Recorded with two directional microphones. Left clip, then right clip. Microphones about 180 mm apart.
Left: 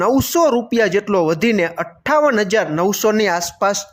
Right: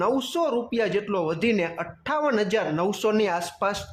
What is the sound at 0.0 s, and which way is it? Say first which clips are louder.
Speech: left 9 dB; 40° left (ahead or behind).